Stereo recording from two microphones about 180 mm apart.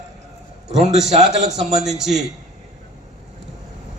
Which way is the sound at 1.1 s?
40° right (ahead or behind).